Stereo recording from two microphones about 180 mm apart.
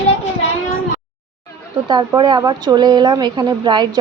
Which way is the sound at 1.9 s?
25° right (ahead or behind).